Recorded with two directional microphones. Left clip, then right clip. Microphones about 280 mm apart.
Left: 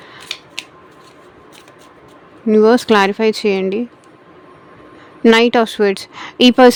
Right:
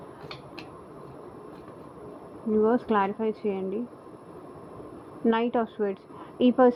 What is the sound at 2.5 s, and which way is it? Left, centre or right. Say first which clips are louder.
A woman's voice: left 13 dB; left.